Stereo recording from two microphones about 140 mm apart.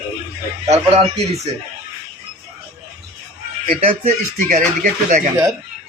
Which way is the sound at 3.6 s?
55° right (ahead or behind).